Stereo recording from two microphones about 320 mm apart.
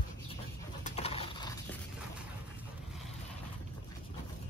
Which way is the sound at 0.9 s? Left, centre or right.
Centre.